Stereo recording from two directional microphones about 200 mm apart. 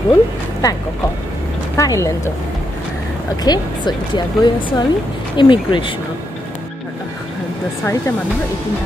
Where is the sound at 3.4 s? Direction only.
20° left (ahead or behind).